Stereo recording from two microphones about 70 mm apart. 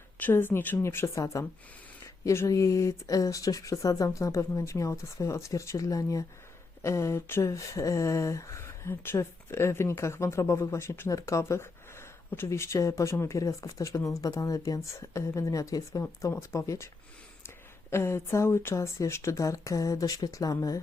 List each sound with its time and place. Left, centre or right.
0.2 s a woman's voice: left
1.1 s a woman's voice: left
2.5 s speech: left
7.5 s speech: left
16.3 s a woman's voice: left
17.9 s speech: left